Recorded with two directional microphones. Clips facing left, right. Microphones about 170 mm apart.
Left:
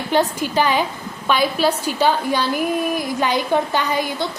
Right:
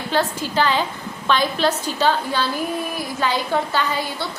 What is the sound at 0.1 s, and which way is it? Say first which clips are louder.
A woman's voice: left 3 dB; 15° left (ahead or behind).